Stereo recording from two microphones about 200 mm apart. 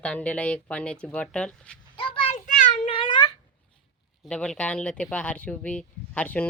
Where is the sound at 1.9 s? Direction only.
25° left (ahead or behind).